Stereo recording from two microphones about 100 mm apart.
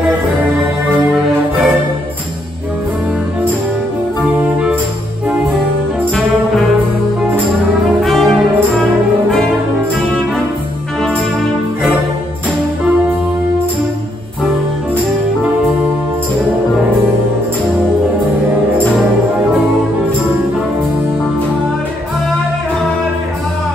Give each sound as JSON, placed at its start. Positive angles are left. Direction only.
{"t": 4.2, "sound": "music", "side_deg": -15}
{"t": 8.0, "sound": "brass instrument", "side_deg": 0}